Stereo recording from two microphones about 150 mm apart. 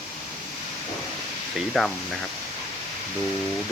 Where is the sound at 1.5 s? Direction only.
Centre (ahead or behind).